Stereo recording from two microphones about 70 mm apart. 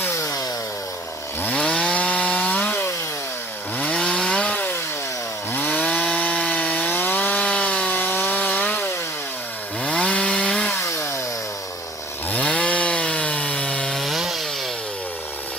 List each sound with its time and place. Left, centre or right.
0.2 s chainsaw: left
1.5 s chainsaw: centre
9.8 s chainsaw: centre
10.8 s chainsaw: left
12.3 s chainsaw: centre
14.0 s chainsaw: centre